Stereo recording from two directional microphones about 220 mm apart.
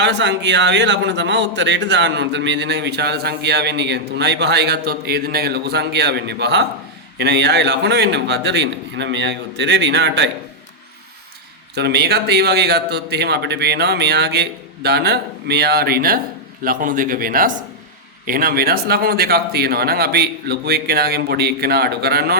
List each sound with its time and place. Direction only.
0.0 s a man's voice: 55° right (ahead or behind)
11.7 s a man's voice: 50° right (ahead or behind)